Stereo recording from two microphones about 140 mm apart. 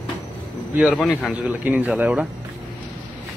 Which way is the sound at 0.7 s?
5° right (ahead or behind).